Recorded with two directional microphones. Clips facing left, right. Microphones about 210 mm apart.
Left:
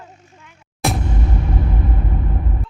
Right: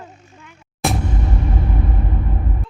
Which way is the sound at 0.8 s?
Centre (ahead or behind).